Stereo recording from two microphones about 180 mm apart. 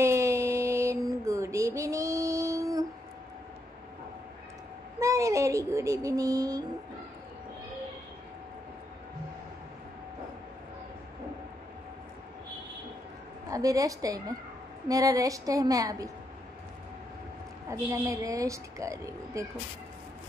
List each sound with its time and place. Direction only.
0.0 s a sound: 15° right (ahead or behind)
5.0 s child singing: 15° right (ahead or behind)
13.5 s a woman's voice: 20° right (ahead or behind)
17.6 s a woman's voice: 15° right (ahead or behind)